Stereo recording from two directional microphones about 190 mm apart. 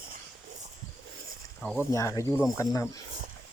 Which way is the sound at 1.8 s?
15° left (ahead or behind).